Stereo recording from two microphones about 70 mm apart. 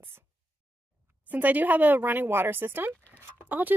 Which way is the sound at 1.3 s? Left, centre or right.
Right.